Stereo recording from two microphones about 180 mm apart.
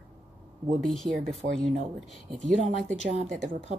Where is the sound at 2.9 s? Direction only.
40° right (ahead or behind).